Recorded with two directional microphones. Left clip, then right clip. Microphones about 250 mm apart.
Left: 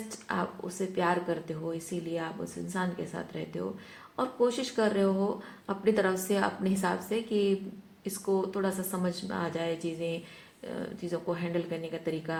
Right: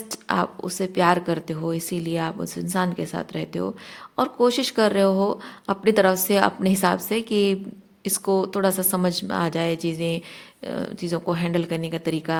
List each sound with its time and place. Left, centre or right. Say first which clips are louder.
0.3 s speech: right 9 dB; right